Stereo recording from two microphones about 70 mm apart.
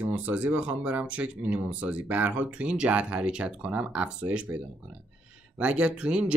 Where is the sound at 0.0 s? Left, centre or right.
Right.